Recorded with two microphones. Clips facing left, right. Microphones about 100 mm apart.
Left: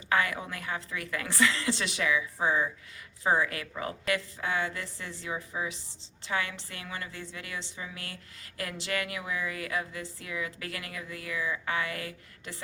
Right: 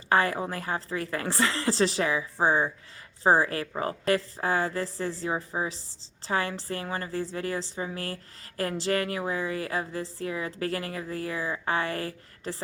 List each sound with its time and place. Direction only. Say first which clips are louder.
0.1 s a woman's voice: right 4 dB; 35° right (ahead or behind)